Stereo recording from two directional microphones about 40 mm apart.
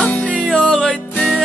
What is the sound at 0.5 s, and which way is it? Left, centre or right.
Music, left.